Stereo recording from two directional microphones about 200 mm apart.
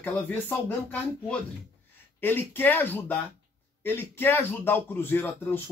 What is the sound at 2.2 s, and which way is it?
Speech, 10° left (ahead or behind).